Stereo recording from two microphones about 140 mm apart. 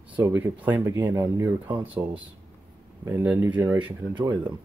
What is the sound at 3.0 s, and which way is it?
Speech, 15° right (ahead or behind).